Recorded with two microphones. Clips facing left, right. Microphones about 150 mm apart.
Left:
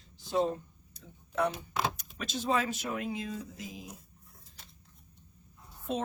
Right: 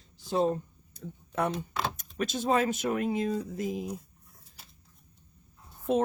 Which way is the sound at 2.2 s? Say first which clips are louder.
Right 5 dB; 50° right (ahead or behind).